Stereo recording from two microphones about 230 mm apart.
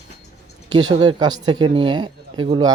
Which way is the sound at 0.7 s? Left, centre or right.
Centre.